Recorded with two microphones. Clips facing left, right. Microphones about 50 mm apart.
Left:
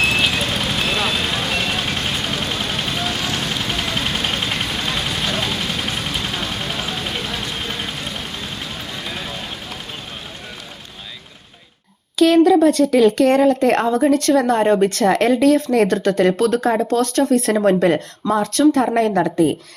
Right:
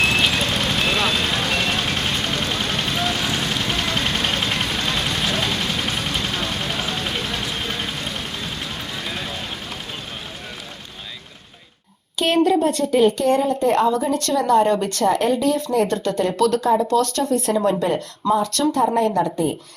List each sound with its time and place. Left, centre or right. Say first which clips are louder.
0.0 s vehicle: left 1 dB; centre
12.5 s speech: left 4 dB; left
14.0 s a woman's voice: left 6 dB; left
14.6 s speech: left 3 dB; left
15.0 s speech: left 2 dB; left
16.0 s a woman's voice: left 3 dB; left
17.3 s a woman's voice: left 2 dB; left